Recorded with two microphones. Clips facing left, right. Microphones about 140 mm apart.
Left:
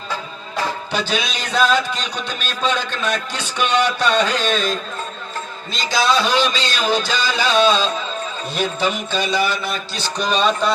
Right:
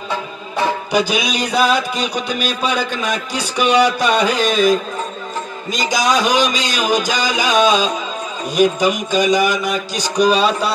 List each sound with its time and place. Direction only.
0.9 s music: 10° right (ahead or behind)